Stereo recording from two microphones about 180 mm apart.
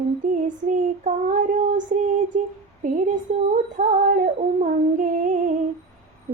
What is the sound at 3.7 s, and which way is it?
Child singing, 45° right (ahead or behind).